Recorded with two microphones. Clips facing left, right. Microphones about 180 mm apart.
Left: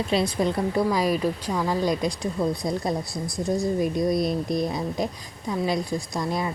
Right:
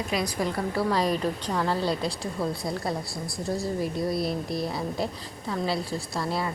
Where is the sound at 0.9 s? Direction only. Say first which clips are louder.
Left 2 dB; 10° left (ahead or behind).